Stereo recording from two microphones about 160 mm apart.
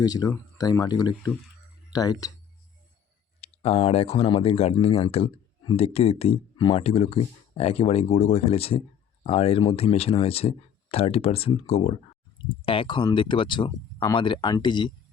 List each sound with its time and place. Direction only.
0.0 s speech: 25° left (ahead or behind)
3.4 s speech: 40° left (ahead or behind)